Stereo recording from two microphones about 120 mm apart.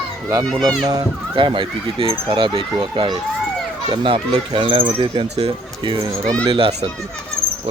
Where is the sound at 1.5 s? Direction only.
45° right (ahead or behind).